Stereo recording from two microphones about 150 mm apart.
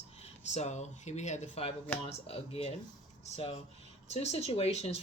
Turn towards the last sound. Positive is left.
turn(degrees=45)  # may be behind; listen again after turning